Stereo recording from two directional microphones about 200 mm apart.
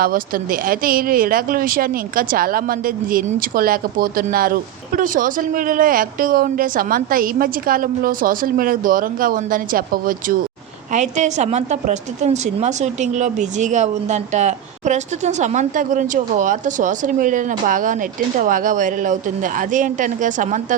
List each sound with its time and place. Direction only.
0.0 s a woman's voice: 45° right (ahead or behind)